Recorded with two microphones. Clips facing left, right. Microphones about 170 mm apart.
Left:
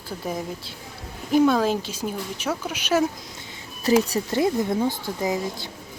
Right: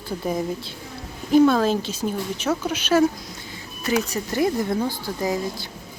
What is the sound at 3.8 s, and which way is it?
Speech, 30° left (ahead or behind).